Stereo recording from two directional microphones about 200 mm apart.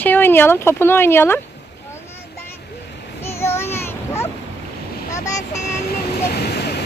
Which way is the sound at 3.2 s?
15° left (ahead or behind).